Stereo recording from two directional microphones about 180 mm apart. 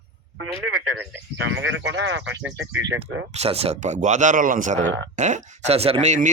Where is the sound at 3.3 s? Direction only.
35° right (ahead or behind).